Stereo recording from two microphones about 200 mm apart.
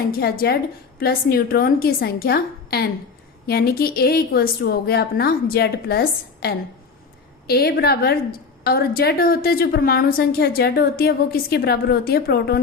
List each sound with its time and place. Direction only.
0.1 s a woman's voice: 50° left (ahead or behind)